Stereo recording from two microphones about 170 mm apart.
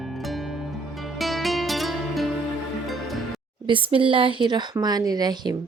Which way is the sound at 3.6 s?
30° right (ahead or behind).